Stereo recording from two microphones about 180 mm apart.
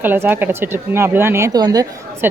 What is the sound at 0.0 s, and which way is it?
Speech, 10° right (ahead or behind).